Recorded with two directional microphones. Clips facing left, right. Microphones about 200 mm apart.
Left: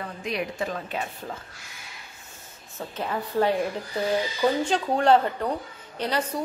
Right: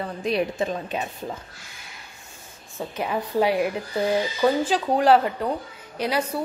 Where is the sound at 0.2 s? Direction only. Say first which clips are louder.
Right 5 dB; 30° right (ahead or behind).